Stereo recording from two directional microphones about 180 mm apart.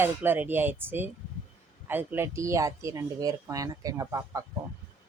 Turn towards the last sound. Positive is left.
turn(degrees=-20)  # may be behind; listen again after turning